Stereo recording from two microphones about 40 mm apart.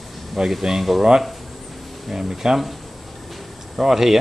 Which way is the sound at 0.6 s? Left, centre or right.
Centre.